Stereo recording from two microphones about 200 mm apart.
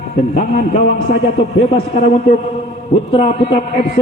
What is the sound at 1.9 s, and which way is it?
Speech, 45° left (ahead or behind).